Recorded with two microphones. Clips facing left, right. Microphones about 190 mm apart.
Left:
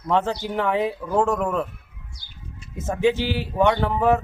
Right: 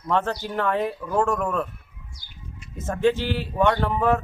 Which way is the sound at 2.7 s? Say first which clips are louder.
Left 1 dB; 5° left (ahead or behind).